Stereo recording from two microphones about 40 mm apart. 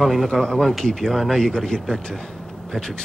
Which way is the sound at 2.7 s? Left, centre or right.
Left.